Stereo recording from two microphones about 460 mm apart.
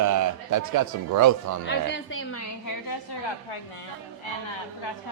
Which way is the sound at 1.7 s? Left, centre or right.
Left.